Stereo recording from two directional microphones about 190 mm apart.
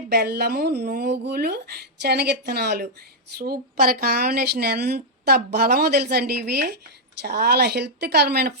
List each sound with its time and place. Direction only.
0.1 s speech: 55° right (ahead or behind)